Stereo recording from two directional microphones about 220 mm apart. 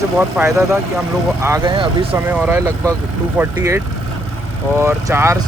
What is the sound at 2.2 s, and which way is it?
Speech, 10° right (ahead or behind).